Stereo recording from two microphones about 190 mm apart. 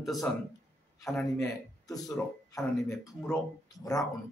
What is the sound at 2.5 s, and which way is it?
Speech, 15° left (ahead or behind).